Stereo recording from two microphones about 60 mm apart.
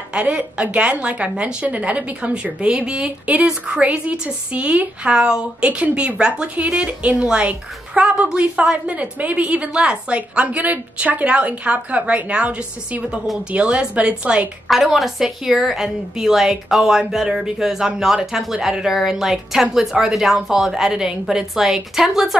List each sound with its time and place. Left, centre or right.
0.1 s speech: centre
14.7 s a woman's voice: centre